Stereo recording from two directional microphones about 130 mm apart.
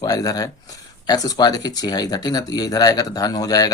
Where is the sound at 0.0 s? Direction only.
30° left (ahead or behind).